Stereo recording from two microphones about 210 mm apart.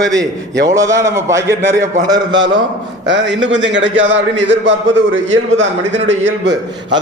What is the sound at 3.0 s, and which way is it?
A man's voice, 60° right (ahead or behind).